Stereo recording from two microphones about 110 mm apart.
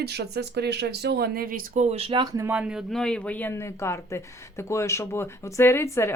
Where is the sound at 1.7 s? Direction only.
75° right (ahead or behind).